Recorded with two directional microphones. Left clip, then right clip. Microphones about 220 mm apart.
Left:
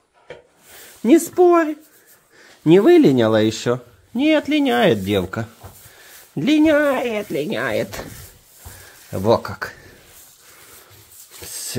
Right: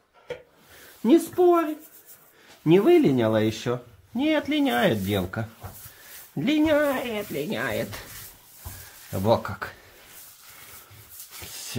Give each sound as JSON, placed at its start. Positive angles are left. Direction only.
{"t": 1.0, "sound": "speech", "side_deg": 25}
{"t": 9.1, "sound": "speech", "side_deg": 20}
{"t": 11.4, "sound": "a sound", "side_deg": 25}